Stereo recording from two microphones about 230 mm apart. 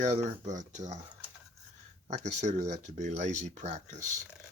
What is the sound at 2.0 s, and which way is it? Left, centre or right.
Speech, right.